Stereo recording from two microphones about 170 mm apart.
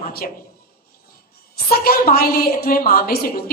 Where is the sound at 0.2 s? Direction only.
50° left (ahead or behind).